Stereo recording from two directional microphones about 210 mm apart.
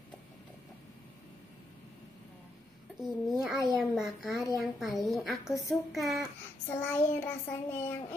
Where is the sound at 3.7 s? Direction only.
Centre (ahead or behind).